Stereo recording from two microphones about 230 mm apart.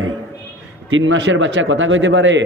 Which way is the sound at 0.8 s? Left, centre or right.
Right.